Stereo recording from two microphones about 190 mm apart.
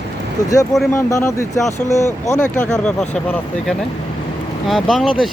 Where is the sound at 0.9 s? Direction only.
15° left (ahead or behind).